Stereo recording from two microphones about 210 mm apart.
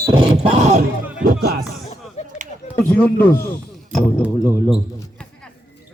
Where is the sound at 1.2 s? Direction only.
45° right (ahead or behind).